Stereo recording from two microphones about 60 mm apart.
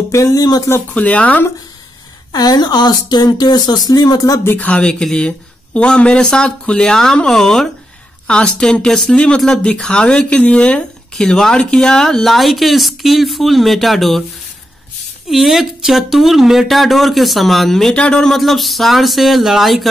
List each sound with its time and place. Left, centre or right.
0.1 s speech: left
0.9 s speech: left
3.3 s speech: left
4.6 s speech: left
11.1 s speech: centre
15.2 s speech: centre
17.9 s speech: centre
18.3 s speech: centre